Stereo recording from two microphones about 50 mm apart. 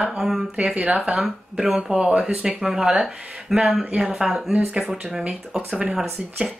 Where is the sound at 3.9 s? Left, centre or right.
Centre.